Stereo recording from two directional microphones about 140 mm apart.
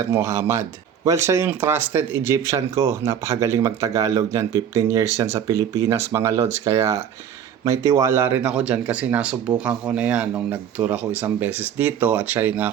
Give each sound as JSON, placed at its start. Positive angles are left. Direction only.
{"t": 0.0, "sound": "speech", "side_deg": -20}